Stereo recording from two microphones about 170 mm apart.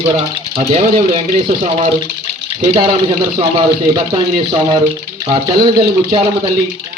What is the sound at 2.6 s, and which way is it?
A man's voice, 30° right (ahead or behind).